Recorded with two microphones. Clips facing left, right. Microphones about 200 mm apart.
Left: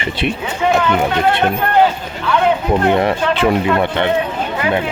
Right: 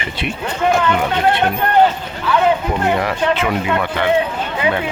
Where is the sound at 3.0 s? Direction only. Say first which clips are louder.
Left 3 dB; 30° left (ahead or behind).